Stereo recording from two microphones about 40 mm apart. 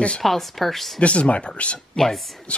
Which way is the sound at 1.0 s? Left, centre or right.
Left.